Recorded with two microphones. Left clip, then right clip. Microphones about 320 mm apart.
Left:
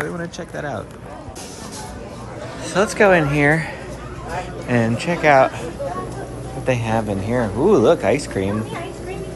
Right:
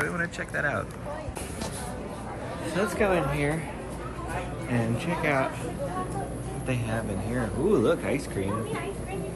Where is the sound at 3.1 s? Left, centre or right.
Left.